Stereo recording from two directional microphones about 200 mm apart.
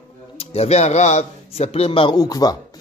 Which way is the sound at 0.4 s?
30° left (ahead or behind).